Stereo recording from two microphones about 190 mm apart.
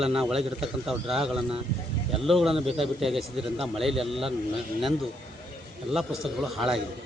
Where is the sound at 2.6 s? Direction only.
30° right (ahead or behind).